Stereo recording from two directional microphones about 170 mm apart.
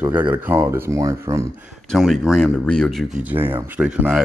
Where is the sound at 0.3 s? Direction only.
10° right (ahead or behind).